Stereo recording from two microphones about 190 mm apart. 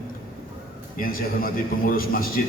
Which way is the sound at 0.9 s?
50° left (ahead or behind).